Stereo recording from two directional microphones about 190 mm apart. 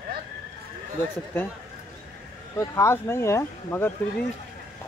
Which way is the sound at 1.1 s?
10° left (ahead or behind).